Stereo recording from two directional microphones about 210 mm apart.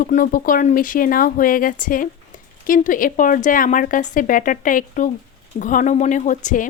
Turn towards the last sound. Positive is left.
turn(degrees=40)  # may be behind; listen again after turning